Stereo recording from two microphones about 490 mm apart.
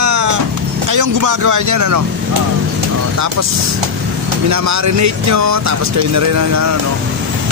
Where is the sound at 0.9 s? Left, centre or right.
Right.